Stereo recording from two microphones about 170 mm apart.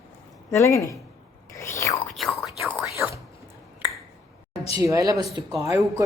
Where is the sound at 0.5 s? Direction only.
20° left (ahead or behind).